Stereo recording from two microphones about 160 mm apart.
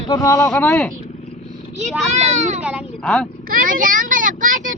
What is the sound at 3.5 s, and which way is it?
A child's voice, 60° right (ahead or behind).